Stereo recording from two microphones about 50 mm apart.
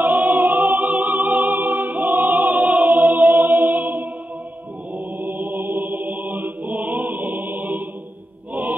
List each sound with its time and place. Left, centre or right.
0.0 s opera: right
4.9 s chant: right